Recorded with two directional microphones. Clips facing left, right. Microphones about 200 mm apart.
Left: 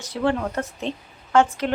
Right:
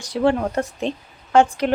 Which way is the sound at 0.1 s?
20° right (ahead or behind).